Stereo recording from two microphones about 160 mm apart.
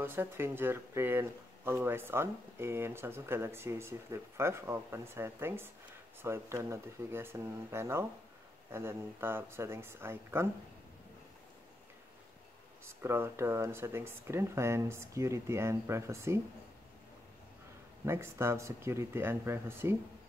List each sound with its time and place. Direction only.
0.0 s speech: 15° right (ahead or behind)
12.8 s speech: 15° right (ahead or behind)
18.0 s speech: 15° right (ahead or behind)